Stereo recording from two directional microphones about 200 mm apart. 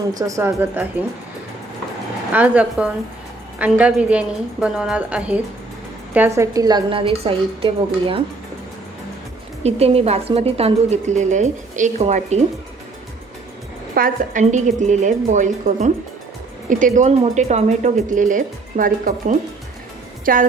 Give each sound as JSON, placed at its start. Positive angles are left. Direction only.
{"t": 0.1, "sound": "a woman's voice", "side_deg": -15}
{"t": 2.3, "sound": "a woman's voice", "side_deg": -5}
{"t": 9.6, "sound": "a woman's voice", "side_deg": -30}
{"t": 13.9, "sound": "a woman's voice", "side_deg": -40}
{"t": 20.2, "sound": "music", "side_deg": -45}